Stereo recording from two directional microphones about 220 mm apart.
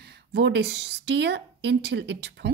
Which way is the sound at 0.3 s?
50° right (ahead or behind).